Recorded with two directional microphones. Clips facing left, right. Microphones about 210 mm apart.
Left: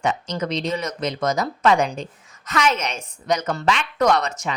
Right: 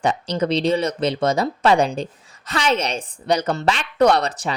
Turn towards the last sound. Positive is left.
turn(degrees=-35)  # may be behind; listen again after turning